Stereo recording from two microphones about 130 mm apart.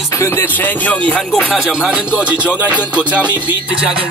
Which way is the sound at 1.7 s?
5° right (ahead or behind).